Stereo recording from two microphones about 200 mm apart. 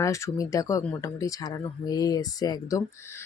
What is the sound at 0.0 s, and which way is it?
Speech, 15° left (ahead or behind).